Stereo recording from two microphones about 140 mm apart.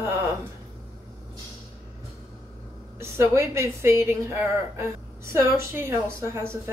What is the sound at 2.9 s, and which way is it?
Speech, 20° right (ahead or behind).